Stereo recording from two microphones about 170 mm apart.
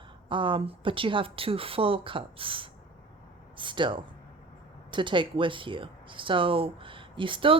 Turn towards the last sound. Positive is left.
turn(degrees=-30)  # may be behind; listen again after turning